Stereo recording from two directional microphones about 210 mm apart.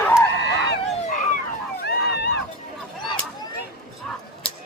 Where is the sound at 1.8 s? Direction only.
50° left (ahead or behind).